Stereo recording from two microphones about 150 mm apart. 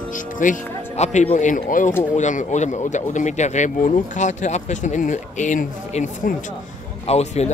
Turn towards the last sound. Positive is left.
turn(degrees=45)  # may be behind; listen again after turning